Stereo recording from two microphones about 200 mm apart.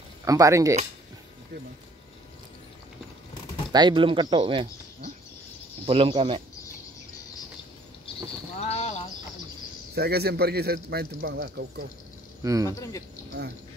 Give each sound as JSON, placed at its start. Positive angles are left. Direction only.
{"t": 0.2, "sound": "speech", "side_deg": -15}
{"t": 3.7, "sound": "speech", "side_deg": -25}
{"t": 5.9, "sound": "speech", "side_deg": -25}
{"t": 8.5, "sound": "a sound", "side_deg": 35}
{"t": 9.9, "sound": "a man's voice", "side_deg": -50}
{"t": 12.6, "sound": "speech", "side_deg": 15}